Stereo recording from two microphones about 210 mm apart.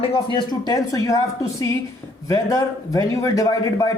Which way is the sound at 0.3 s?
20° left (ahead or behind).